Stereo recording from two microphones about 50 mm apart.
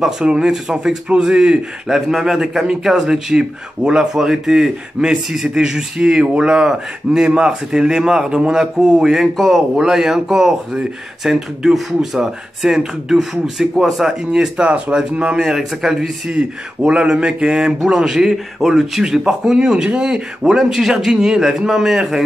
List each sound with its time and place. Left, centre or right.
0.2 s a man's voice: centre
9.1 s a man's voice: centre
14.0 s a man's voice: centre
16.3 s a man's voice: centre